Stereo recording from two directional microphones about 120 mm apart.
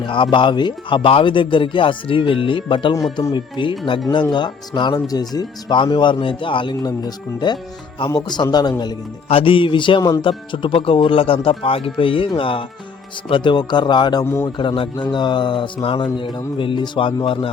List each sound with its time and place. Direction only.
0.0 s speech: 40° left (ahead or behind)
9.3 s speech: 50° left (ahead or behind)